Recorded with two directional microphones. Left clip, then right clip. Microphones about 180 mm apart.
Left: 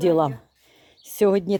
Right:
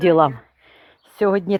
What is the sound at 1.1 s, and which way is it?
Speech, 25° left (ahead or behind).